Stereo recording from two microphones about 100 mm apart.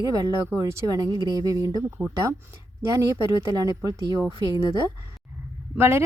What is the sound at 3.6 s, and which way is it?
Speech, 35° right (ahead or behind).